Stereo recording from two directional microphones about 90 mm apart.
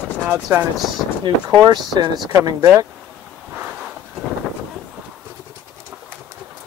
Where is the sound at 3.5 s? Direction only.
15° right (ahead or behind).